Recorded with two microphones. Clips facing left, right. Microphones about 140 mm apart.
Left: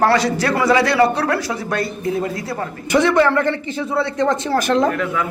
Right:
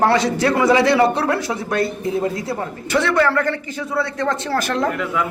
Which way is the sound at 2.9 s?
15° left (ahead or behind).